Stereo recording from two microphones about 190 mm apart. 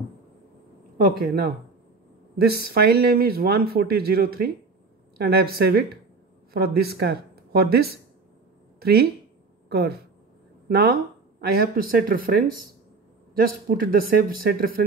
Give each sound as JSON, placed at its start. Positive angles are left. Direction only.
{"t": 0.9, "sound": "speech", "side_deg": -50}